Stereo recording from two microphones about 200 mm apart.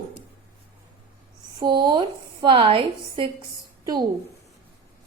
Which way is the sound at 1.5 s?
20° right (ahead or behind).